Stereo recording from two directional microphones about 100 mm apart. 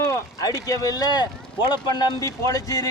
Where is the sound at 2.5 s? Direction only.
35° left (ahead or behind).